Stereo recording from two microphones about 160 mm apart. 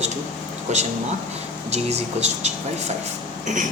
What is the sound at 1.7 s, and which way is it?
Speech, 40° right (ahead or behind).